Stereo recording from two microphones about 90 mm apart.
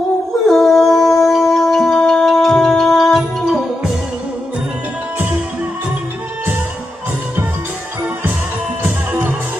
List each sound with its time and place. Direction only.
0.4 s music: centre (ahead or behind)
8.8 s music: 25° right (ahead or behind)